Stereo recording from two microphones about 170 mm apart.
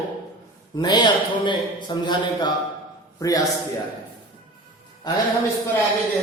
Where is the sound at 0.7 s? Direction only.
25° left (ahead or behind).